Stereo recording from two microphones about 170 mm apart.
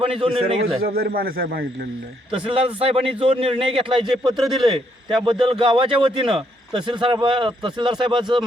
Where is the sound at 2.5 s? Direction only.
35° right (ahead or behind).